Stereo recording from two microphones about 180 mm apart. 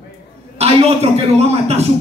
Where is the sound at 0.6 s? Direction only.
35° right (ahead or behind).